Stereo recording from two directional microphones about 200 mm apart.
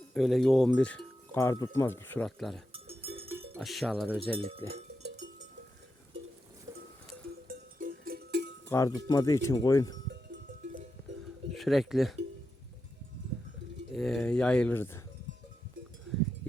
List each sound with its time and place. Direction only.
0.1 s speech: centre (ahead or behind)
2.7 s cowbell: 30° right (ahead or behind)
3.6 s speech: centre (ahead or behind)
4.4 s speech: 30° right (ahead or behind)
6.7 s cowbell: 20° right (ahead or behind)
7.4 s cowbell: 45° right (ahead or behind)
8.7 s speech: 15° left (ahead or behind)
11.5 s speech: centre (ahead or behind)
13.9 s speech: centre (ahead or behind)